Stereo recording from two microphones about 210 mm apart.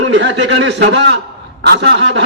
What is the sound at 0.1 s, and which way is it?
A man's voice, 60° right (ahead or behind).